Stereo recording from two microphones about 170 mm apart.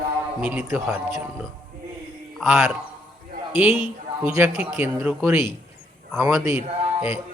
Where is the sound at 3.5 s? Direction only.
10° right (ahead or behind).